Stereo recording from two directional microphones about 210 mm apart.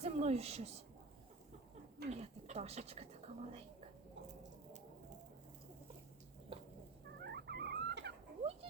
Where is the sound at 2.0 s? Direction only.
30° right (ahead or behind).